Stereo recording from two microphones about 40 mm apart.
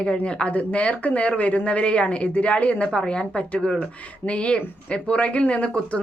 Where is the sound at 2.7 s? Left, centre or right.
Left.